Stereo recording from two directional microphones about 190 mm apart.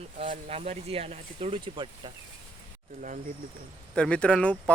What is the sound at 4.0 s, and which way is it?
Speech, 5° left (ahead or behind).